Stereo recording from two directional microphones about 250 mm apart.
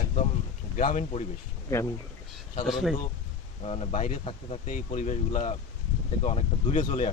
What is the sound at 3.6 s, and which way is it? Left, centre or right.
Speech, left.